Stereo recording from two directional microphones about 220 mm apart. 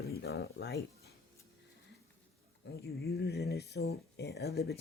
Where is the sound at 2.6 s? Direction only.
50° left (ahead or behind).